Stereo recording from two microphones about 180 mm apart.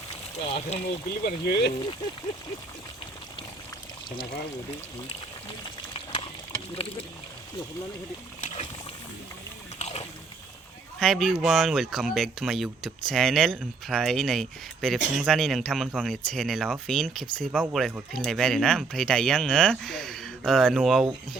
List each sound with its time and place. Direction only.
0.7 s speech: 40° left (ahead or behind)
1.2 s speech: 60° left (ahead or behind)
5.0 s frying: 30° left (ahead or behind)
8.4 s splash: 40° left (ahead or behind)
9.7 s a sound: 35° left (ahead or behind)
11.0 s speech: centre (ahead or behind)
17.6 s speech: 10° right (ahead or behind)